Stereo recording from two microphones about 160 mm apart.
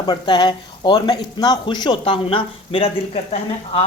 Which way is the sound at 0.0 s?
25° left (ahead or behind).